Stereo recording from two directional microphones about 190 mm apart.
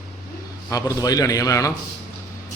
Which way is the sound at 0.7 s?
20° left (ahead or behind).